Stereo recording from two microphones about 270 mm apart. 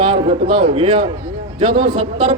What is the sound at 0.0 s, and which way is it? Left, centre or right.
A man's voice, centre.